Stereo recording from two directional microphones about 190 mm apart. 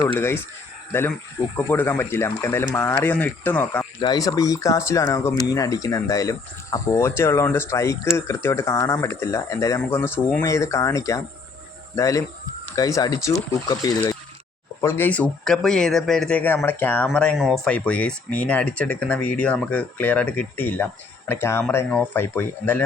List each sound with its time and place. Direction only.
0.1 s speech: 10° left (ahead or behind)
1.5 s speech: 10° left (ahead or behind)